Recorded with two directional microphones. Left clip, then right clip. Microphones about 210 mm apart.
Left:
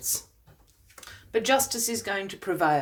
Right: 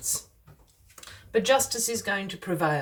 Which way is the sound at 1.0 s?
30° left (ahead or behind).